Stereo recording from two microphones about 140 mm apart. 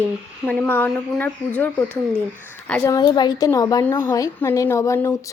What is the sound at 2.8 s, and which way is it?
A woman's voice, 20° left (ahead or behind).